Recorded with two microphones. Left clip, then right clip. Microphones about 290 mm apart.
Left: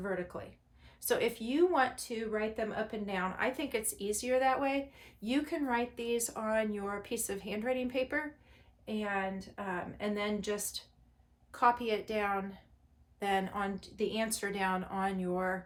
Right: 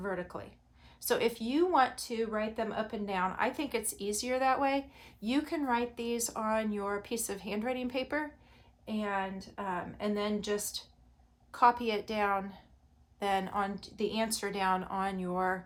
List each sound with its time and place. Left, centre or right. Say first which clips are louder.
0.0 s a woman's voice: even; centre